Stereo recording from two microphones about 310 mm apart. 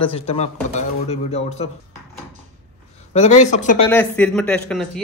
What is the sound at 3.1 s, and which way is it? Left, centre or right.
Speech, left.